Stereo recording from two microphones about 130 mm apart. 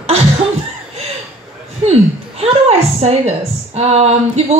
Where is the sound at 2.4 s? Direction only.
50° right (ahead or behind).